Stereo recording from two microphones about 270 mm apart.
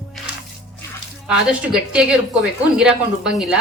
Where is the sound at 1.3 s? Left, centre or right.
Centre.